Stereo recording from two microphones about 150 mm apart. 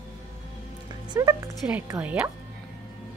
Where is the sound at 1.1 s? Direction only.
25° right (ahead or behind).